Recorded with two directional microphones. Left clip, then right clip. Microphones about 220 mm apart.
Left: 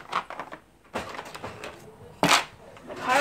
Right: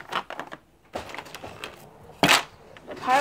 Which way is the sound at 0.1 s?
30° right (ahead or behind).